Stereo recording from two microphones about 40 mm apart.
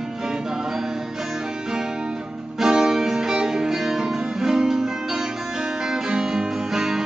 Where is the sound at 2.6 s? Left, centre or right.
Centre.